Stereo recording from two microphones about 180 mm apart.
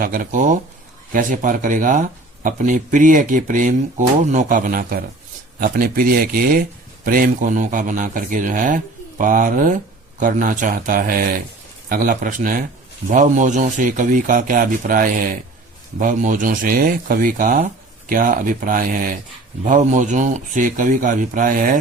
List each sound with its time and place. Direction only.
0.0 s speech: 50° right (ahead or behind)